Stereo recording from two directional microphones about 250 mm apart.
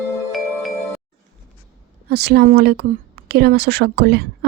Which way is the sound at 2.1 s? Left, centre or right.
Right.